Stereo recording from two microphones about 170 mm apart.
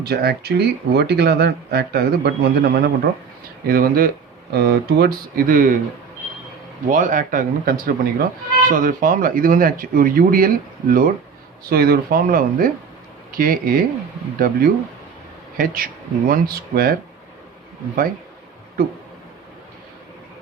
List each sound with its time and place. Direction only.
0.0 s speech: 70° right (ahead or behind)
3.7 s speech: 60° right (ahead or behind)
4.5 s speech: 70° right (ahead or behind); by 5.8 s 55° right (ahead or behind)
6.9 s speech: 50° right (ahead or behind)